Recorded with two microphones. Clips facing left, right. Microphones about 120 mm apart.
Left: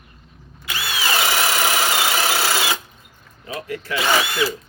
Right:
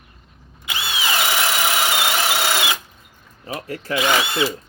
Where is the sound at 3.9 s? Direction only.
20° right (ahead or behind).